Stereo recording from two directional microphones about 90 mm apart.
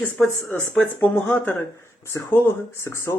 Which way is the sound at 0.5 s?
20° left (ahead or behind).